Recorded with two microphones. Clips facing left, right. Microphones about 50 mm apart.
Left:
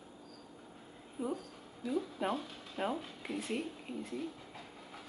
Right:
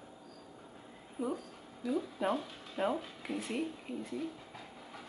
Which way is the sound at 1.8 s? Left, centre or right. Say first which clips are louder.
Right 2 dB; centre.